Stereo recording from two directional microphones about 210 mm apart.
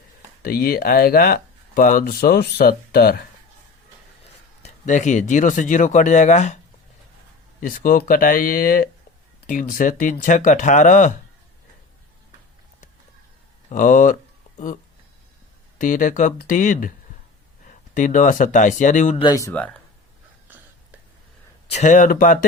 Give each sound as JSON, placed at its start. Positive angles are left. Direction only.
{"t": 0.4, "sound": "speech", "side_deg": 45}
{"t": 4.6, "sound": "speech", "side_deg": 35}
{"t": 7.6, "sound": "speech", "side_deg": 40}
{"t": 13.7, "sound": "speech", "side_deg": 40}
{"t": 15.8, "sound": "speech", "side_deg": 40}
{"t": 19.2, "sound": "speech", "side_deg": 15}
{"t": 21.7, "sound": "speech", "side_deg": 35}